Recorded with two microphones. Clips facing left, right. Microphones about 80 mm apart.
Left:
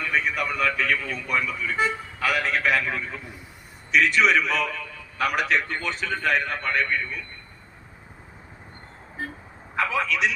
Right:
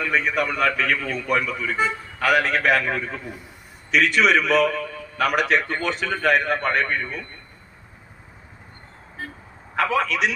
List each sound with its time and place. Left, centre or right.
0.0 s a man's voice: right
3.9 s a man's voice: right
9.7 s a man's voice: right